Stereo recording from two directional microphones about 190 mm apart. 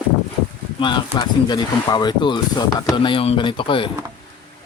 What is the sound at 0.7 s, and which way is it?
Speech, 25° left (ahead or behind).